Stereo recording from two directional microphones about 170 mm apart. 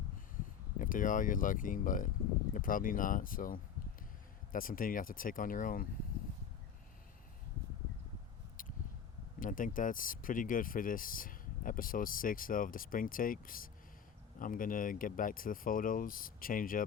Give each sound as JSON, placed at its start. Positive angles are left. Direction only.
{"t": 0.8, "sound": "speech", "side_deg": 50}
{"t": 8.6, "sound": "a sound", "side_deg": 55}
{"t": 9.4, "sound": "speech", "side_deg": 50}